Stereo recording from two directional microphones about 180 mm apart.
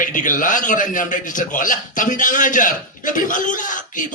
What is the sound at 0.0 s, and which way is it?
A man's voice, 45° left (ahead or behind).